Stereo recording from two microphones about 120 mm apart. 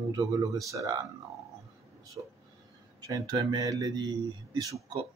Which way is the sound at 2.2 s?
35° right (ahead or behind).